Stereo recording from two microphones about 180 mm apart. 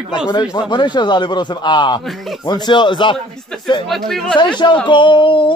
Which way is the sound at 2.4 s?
25° left (ahead or behind).